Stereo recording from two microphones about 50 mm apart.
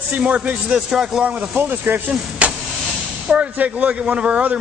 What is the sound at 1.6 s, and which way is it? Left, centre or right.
Speech, right.